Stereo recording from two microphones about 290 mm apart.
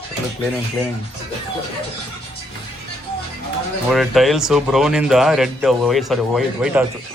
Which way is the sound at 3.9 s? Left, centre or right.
Centre.